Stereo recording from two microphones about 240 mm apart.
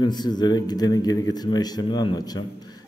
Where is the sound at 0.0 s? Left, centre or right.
Centre.